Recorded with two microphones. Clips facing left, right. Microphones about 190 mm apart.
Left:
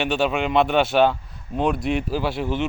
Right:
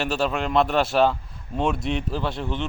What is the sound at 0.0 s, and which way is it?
Speech, centre (ahead or behind).